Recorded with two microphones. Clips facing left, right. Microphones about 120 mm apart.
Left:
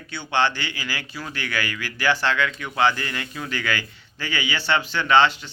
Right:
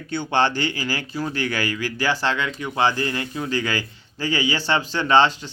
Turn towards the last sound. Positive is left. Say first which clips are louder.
# right 1 dB
turn(degrees=-35)  # may be behind; listen again after turning